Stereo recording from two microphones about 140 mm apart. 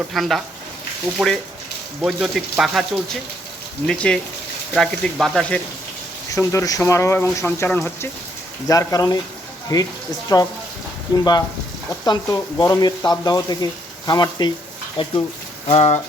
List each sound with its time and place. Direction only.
0.1 s speech: centre (ahead or behind)
6.3 s speech: 20° left (ahead or behind)
15.0 s speech: 40° left (ahead or behind)